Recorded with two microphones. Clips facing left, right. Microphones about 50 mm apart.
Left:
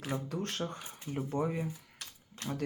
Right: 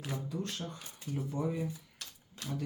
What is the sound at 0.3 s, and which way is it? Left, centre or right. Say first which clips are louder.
Speech: left 3 dB; left.